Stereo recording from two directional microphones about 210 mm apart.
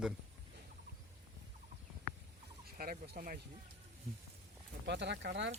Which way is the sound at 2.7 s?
45° right (ahead or behind).